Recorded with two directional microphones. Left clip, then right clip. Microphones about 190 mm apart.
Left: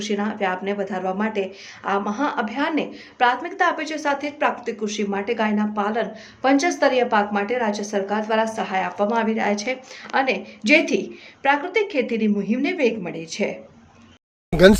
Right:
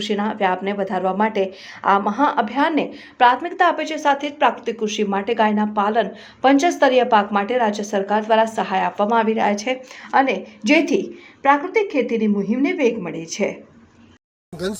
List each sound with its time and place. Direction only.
0.0 s a woman's voice: 25° right (ahead or behind)
12.7 s a woman's voice: 10° right (ahead or behind)
14.5 s speech: 45° right (ahead or behind)